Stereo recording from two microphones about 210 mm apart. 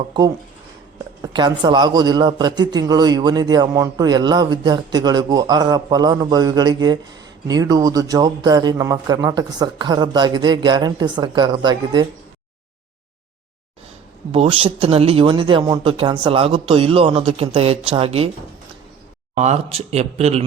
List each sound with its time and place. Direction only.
1.2 s a man's voice: 20° right (ahead or behind)
14.3 s a man's voice: 25° right (ahead or behind)
19.3 s speech: 35° right (ahead or behind)